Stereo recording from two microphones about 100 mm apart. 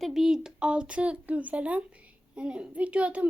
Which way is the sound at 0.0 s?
5° right (ahead or behind).